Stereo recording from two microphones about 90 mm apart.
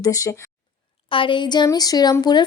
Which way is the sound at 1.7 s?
45° left (ahead or behind).